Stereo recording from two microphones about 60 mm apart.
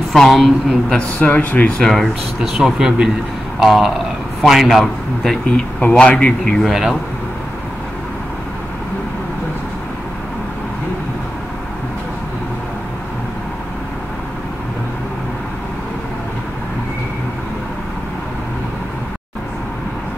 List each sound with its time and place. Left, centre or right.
0.1 s a man's voice: centre
0.9 s speech: left
1.8 s a man's voice: centre
2.5 s a man's voice: centre
5.8 s speech: centre
6.7 s speech: centre